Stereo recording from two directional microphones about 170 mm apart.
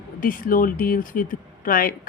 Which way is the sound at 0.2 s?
55° left (ahead or behind).